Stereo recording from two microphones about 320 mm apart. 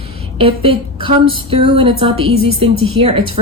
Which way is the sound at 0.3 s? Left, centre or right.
Centre.